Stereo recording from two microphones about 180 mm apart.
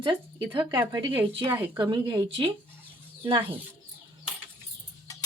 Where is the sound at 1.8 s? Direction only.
25° right (ahead or behind).